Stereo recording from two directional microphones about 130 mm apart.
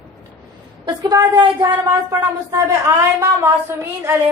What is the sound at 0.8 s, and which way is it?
Speech, 30° right (ahead or behind).